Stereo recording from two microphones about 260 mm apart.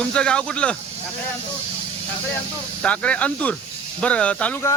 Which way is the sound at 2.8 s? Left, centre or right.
Centre.